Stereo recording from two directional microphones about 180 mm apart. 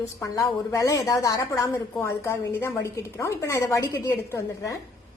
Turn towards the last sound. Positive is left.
turn(degrees=15)  # may be behind; listen again after turning